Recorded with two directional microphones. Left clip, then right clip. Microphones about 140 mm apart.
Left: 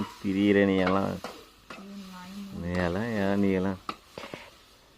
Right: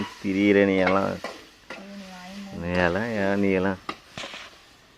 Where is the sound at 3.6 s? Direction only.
20° right (ahead or behind).